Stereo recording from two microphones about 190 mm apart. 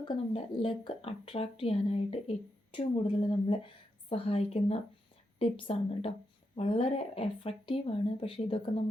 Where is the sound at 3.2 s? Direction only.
25° left (ahead or behind).